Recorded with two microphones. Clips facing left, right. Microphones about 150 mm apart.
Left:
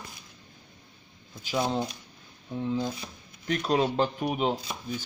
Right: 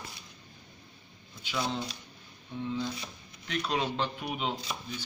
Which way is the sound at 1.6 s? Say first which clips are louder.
Left 5 dB; 50° left (ahead or behind).